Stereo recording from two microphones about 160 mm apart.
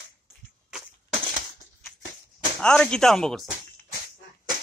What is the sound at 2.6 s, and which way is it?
Speech, 5° left (ahead or behind).